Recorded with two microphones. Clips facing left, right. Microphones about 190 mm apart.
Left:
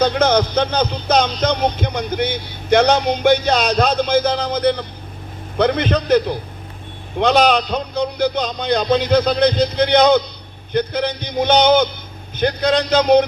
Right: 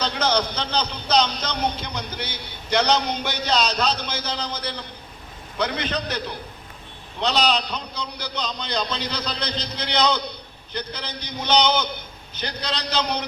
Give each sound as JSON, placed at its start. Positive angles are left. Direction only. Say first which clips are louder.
{"t": 0.0, "sound": "music", "louder": "left 8 dB", "side_deg": 50}